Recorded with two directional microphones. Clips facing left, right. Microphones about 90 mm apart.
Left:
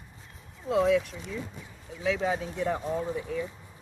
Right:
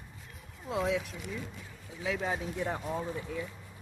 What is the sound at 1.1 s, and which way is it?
Speech, 25° left (ahead or behind).